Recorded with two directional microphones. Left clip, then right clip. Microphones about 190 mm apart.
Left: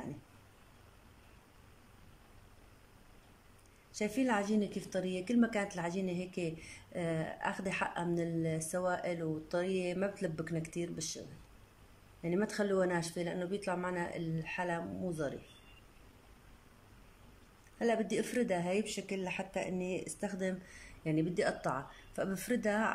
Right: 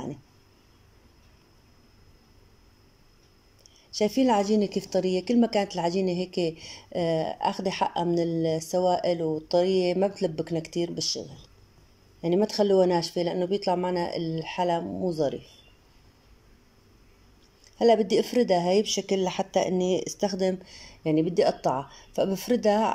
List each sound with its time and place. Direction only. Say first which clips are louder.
4.0 s a woman's voice: right 11 dB; 20° right (ahead or behind)
12.2 s a woman's voice: right 11 dB; 25° right (ahead or behind)
17.7 s a woman's voice: right 13 dB; 20° right (ahead or behind)